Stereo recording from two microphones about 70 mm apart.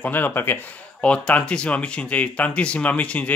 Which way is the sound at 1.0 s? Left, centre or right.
Centre.